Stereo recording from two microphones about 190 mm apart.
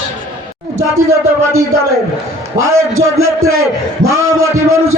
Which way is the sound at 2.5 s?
90° right.